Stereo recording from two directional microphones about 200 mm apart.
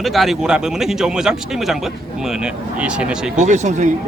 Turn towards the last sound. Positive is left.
turn(degrees=-35)  # may be behind; listen again after turning